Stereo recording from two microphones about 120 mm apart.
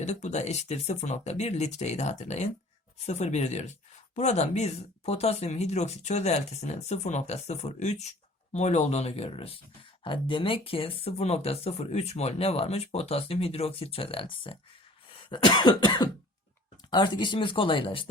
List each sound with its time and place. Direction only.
0.0 s speech: 70° left (ahead or behind); by 14.6 s 45° left (ahead or behind)
15.3 s cough: 35° left (ahead or behind)
16.9 s speech: 40° left (ahead or behind)